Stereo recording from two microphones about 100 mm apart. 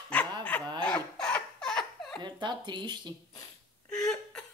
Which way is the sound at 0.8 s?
10° left (ahead or behind).